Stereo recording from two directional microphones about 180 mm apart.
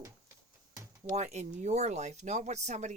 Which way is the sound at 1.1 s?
40° right (ahead or behind).